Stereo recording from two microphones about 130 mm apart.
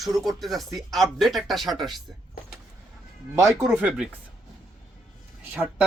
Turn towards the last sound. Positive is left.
turn(degrees=-5)  # may be behind; listen again after turning